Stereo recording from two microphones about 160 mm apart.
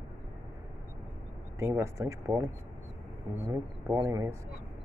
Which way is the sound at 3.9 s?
20° right (ahead or behind).